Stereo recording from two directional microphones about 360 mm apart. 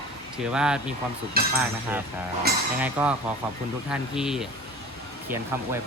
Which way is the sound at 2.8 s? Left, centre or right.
Centre.